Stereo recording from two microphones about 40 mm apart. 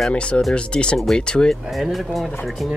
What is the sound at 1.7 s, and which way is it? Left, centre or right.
Speech, centre.